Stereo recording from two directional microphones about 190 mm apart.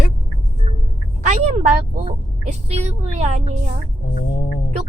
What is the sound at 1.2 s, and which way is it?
A woman's voice, 40° right (ahead or behind).